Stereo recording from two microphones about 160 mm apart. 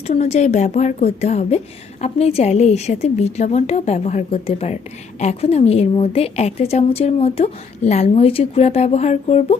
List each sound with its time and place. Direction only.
0.1 s a woman's voice: 45° left (ahead or behind)